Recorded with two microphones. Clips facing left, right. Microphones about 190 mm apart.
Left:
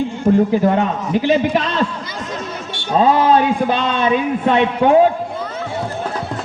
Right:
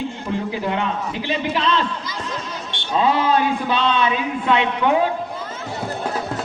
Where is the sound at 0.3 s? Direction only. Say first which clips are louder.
Left 12 dB; 45° left (ahead or behind).